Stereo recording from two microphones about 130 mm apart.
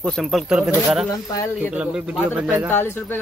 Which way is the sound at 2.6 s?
15° left (ahead or behind).